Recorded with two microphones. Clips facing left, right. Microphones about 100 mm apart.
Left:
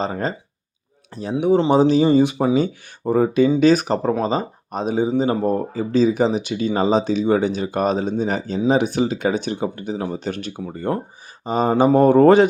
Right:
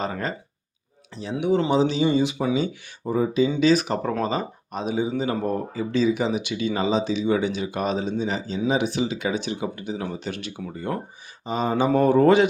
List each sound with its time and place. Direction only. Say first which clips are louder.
0.0 s speech: left 4 dB; 30° left (ahead or behind)
1.1 s speech: left 5 dB; 40° left (ahead or behind)
1.7 s speech: left 6 dB; 45° left (ahead or behind)
3.1 s speech: left 5 dB; 60° left (ahead or behind)
3.5 s speech: left 4 dB; 45° left (ahead or behind)